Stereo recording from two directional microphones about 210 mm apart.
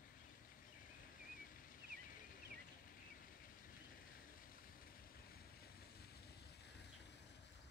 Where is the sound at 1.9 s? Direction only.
40° left (ahead or behind).